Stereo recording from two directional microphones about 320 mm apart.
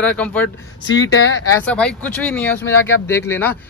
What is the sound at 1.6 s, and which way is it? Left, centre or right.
Speech, centre.